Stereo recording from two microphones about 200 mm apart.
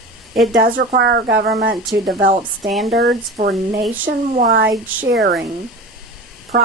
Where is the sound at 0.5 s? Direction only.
60° right (ahead or behind).